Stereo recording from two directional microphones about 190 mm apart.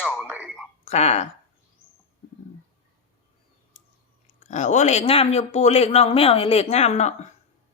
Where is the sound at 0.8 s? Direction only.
35° left (ahead or behind).